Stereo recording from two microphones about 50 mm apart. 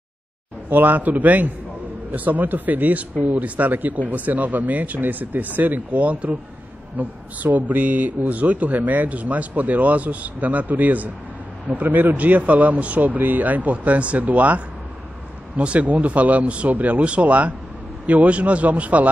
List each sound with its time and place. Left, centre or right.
0.7 s speech: right